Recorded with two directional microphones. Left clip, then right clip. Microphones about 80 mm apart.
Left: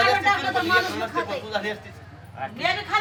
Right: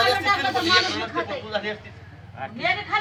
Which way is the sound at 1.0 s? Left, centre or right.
Left.